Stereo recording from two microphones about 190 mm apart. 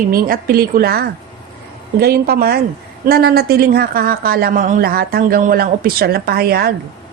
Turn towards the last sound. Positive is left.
turn(degrees=-55)  # may be behind; listen again after turning